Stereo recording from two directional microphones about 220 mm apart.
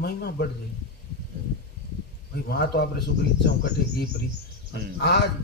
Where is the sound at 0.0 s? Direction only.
50° left (ahead or behind).